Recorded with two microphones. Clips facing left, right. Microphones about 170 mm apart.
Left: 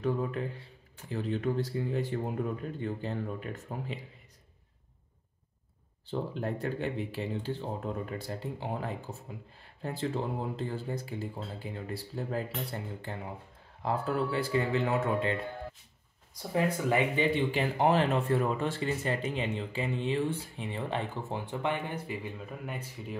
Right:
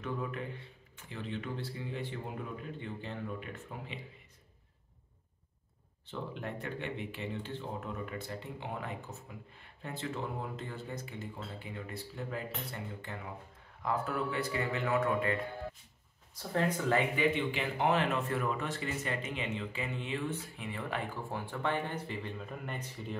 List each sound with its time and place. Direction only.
0.0 s speech: 35° left (ahead or behind)
6.0 s speech: 35° left (ahead or behind)
16.5 s speech: 10° left (ahead or behind)
17.1 s speech: 30° left (ahead or behind); by 23.1 s 5° left (ahead or behind)